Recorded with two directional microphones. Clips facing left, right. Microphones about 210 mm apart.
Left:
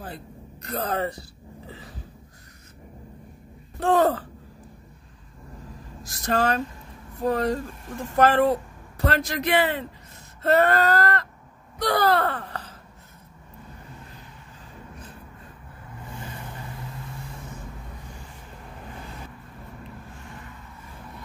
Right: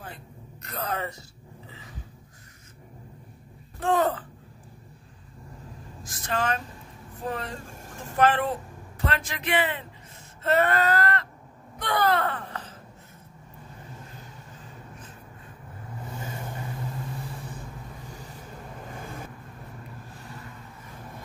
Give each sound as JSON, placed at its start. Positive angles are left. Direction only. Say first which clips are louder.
{"t": 0.0, "sound": "a sound", "louder": "left 5 dB", "side_deg": 35}
{"t": 3.8, "sound": "speech", "louder": "left 4 dB", "side_deg": 35}
{"t": 6.0, "sound": "speech", "louder": "left 5 dB", "side_deg": 35}
{"t": 11.8, "sound": "wail", "louder": "left 3 dB", "side_deg": 35}